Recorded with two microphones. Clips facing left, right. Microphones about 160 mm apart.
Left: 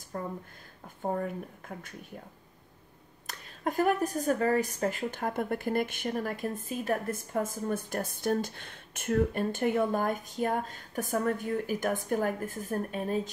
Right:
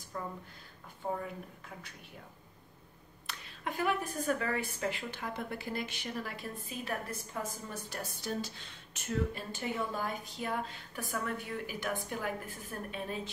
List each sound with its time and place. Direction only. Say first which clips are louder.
0.1 s a woman's voice: left 4 dB; 50° left (ahead or behind)
3.3 s a woman's voice: left 7 dB; 45° left (ahead or behind)